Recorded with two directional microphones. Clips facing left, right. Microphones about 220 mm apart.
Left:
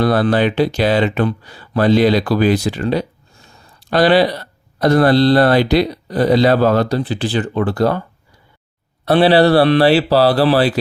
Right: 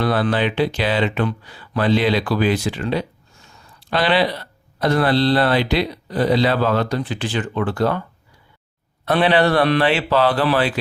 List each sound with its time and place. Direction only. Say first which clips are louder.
0.0 s speech: left 5 dB; 40° left (ahead or behind)
9.0 s speech: left 5 dB; 35° left (ahead or behind)